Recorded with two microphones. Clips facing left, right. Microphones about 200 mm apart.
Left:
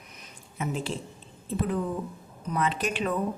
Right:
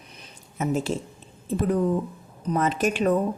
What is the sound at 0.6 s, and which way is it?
Speech, 45° right (ahead or behind).